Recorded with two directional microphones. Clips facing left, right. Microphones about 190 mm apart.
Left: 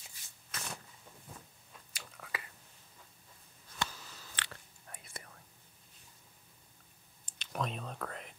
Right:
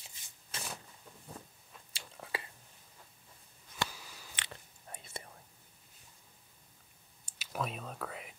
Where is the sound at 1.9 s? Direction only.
30° right (ahead or behind).